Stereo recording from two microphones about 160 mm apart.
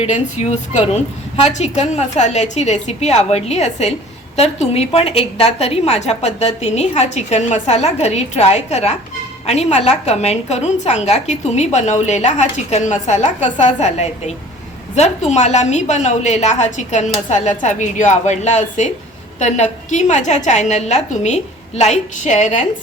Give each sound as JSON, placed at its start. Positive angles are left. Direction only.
{"t": 0.0, "sound": "a woman's voice", "side_deg": 45}